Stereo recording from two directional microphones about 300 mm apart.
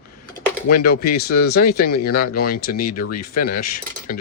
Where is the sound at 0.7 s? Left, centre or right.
Left.